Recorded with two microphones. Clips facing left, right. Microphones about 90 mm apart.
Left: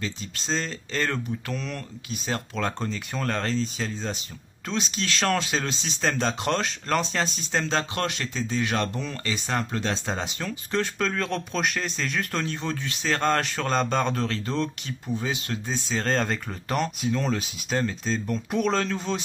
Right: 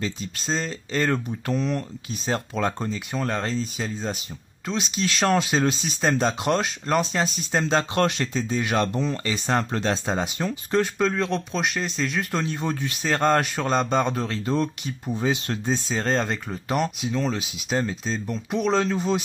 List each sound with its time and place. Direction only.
0.5 s speech: 10° right (ahead or behind)
7.5 s speech: 20° right (ahead or behind)
11.0 s speech: 5° right (ahead or behind)
16.1 s speech: 5° right (ahead or behind)